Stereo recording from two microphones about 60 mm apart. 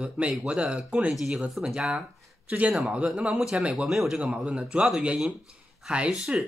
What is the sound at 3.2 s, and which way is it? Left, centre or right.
Speech, centre.